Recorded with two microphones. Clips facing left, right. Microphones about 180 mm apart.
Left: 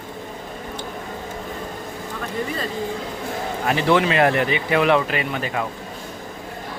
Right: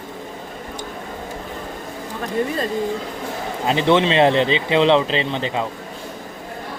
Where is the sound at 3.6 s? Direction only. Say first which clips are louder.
Right 2 dB; 20° right (ahead or behind).